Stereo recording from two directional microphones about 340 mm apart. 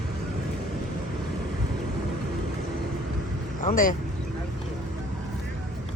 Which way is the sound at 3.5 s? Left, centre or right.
Left.